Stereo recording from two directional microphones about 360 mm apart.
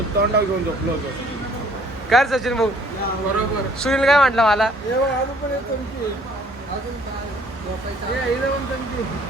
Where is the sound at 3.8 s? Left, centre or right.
Centre.